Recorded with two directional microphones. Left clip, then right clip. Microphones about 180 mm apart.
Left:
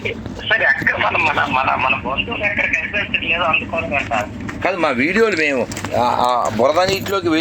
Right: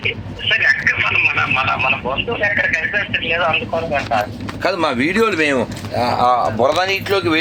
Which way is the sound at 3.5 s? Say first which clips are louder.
Even; 10° right (ahead or behind).